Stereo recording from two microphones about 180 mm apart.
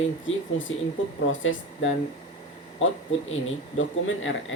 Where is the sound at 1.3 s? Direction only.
90° left.